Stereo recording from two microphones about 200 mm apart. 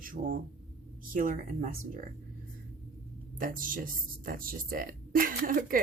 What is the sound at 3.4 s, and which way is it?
Speech, 45° right (ahead or behind).